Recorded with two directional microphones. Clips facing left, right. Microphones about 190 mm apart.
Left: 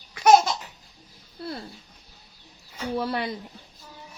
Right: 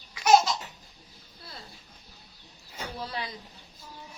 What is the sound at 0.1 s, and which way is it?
Babbling, 55° left (ahead or behind).